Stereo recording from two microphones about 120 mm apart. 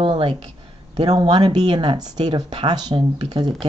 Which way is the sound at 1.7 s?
45° right (ahead or behind).